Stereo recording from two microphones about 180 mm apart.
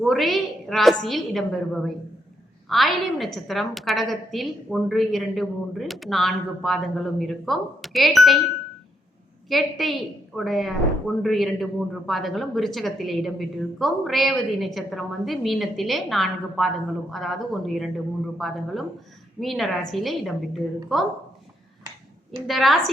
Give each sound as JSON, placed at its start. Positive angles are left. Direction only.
{"t": 0.0, "sound": "speech", "side_deg": 0}
{"t": 9.5, "sound": "speech", "side_deg": 0}
{"t": 22.4, "sound": "speech", "side_deg": 0}